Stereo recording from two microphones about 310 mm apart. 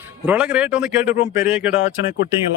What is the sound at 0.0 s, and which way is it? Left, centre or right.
Speech, centre.